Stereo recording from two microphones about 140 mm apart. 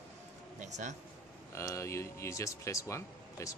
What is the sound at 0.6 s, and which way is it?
Speech, 60° right (ahead or behind).